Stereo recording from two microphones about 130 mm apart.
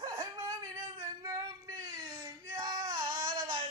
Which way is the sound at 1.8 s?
30° right (ahead or behind).